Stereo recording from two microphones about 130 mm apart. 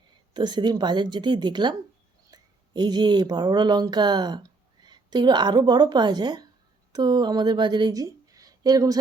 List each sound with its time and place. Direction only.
0.3 s a woman's voice: 35° right (ahead or behind)